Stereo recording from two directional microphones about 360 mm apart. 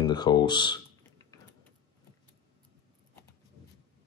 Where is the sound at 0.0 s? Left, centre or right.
Centre.